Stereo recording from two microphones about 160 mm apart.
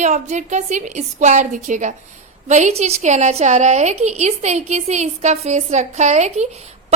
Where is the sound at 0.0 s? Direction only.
45° right (ahead or behind).